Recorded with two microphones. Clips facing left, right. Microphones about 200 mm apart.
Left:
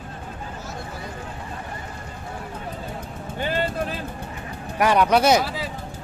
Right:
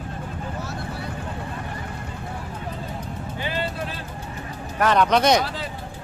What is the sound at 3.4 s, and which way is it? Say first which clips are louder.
Music: left 4 dB; 50° left (ahead or behind).